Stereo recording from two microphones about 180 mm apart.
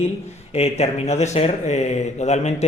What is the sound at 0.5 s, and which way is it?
Speech, 35° left (ahead or behind).